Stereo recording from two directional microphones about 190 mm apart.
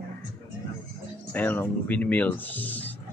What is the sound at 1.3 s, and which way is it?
Speech, 10° left (ahead or behind).